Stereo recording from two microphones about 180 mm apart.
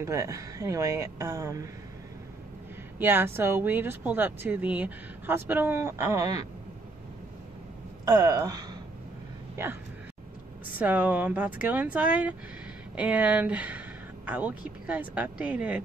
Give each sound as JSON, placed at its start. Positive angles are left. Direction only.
{"t": 0.0, "sound": "speech", "side_deg": -15}
{"t": 3.0, "sound": "speech", "side_deg": -10}
{"t": 8.0, "sound": "speech", "side_deg": -20}
{"t": 10.8, "sound": "speech", "side_deg": -10}